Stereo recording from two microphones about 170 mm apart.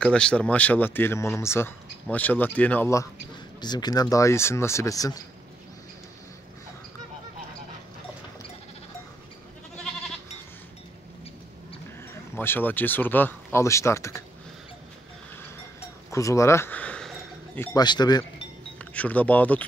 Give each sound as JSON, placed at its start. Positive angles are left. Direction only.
{"t": 0.0, "sound": "speech", "side_deg": 5}
{"t": 12.1, "sound": "speech", "side_deg": 10}
{"t": 16.1, "sound": "speech", "side_deg": 20}
{"t": 17.7, "sound": "speech", "side_deg": 25}
{"t": 18.8, "sound": "speech", "side_deg": 10}